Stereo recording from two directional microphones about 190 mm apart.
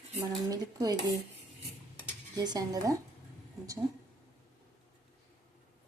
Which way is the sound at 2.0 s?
20° right (ahead or behind).